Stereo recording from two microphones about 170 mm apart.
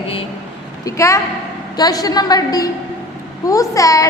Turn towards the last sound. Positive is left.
turn(degrees=20)  # may be behind; listen again after turning